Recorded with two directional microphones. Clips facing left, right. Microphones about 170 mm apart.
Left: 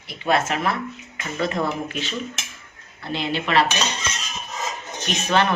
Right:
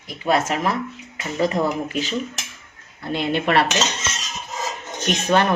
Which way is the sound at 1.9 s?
40° right (ahead or behind).